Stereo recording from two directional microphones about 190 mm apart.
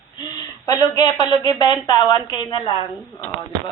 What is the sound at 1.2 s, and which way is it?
A woman's voice, 20° left (ahead or behind).